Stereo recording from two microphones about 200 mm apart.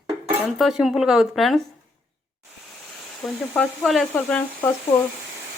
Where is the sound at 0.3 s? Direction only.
5° right (ahead or behind).